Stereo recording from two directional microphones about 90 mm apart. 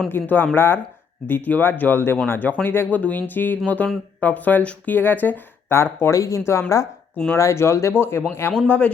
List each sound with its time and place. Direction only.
0.1 s speech: 25° left (ahead or behind)